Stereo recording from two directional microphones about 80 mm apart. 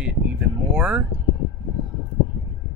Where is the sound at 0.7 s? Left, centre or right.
Centre.